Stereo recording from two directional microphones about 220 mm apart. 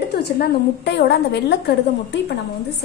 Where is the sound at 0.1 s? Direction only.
45° left (ahead or behind).